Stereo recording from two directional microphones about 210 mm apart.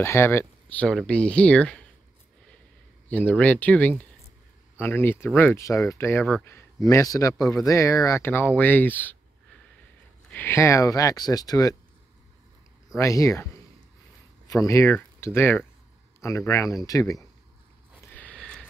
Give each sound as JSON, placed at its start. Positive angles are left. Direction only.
{"t": 0.0, "sound": "speech", "side_deg": 10}
{"t": 3.1, "sound": "a man's voice", "side_deg": 5}
{"t": 10.3, "sound": "speech", "side_deg": 10}
{"t": 12.9, "sound": "speech", "side_deg": 15}
{"t": 14.5, "sound": "speech", "side_deg": 15}
{"t": 18.1, "sound": "a sound", "side_deg": 5}